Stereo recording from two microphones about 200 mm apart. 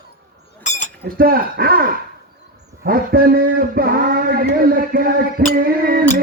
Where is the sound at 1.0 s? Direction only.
45° right (ahead or behind).